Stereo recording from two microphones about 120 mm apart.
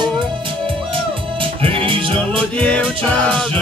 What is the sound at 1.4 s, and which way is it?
Music, 45° right (ahead or behind).